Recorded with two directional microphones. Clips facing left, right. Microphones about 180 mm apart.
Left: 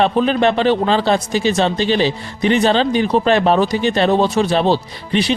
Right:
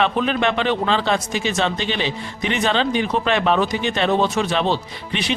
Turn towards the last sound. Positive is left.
turn(degrees=35)  # may be behind; listen again after turning